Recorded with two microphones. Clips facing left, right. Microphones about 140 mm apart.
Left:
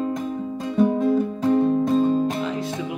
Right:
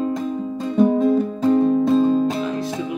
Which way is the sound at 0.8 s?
10° right (ahead or behind).